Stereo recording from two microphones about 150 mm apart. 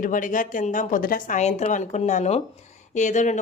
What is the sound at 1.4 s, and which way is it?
Speech, 50° left (ahead or behind).